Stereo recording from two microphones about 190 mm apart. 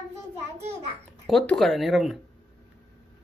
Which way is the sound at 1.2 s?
5° left (ahead or behind).